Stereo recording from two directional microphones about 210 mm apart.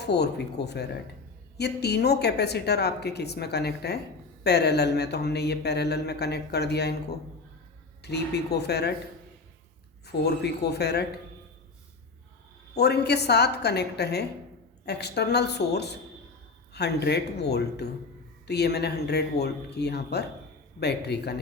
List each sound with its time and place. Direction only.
0.0 s speech: 50° left (ahead or behind)
8.0 s speech: 50° left (ahead or behind)
10.1 s speech: 50° left (ahead or behind)
12.7 s speech: 50° left (ahead or behind)